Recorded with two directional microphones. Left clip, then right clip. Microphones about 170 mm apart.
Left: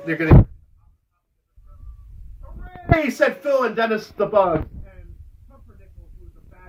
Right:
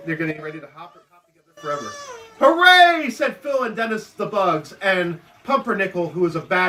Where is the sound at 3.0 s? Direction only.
20° right (ahead or behind).